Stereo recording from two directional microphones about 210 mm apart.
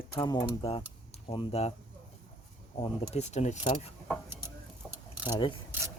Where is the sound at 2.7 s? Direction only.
30° left (ahead or behind).